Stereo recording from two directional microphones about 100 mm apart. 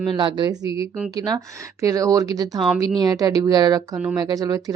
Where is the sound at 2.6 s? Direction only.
Centre (ahead or behind).